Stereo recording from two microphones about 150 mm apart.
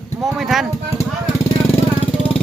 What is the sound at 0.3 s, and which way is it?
Speech, centre (ahead or behind).